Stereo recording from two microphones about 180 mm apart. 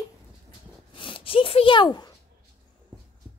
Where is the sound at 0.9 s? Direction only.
30° left (ahead or behind).